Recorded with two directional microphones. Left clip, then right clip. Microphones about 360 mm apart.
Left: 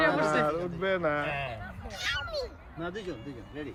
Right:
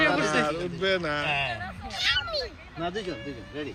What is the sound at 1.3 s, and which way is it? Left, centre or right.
Speech, centre.